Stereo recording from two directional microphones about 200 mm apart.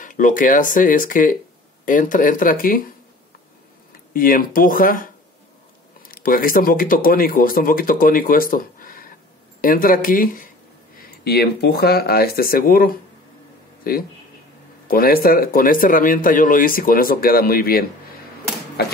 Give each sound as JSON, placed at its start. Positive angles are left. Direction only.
{"t": 0.0, "sound": "speech", "side_deg": 40}
{"t": 4.1, "sound": "speech", "side_deg": 45}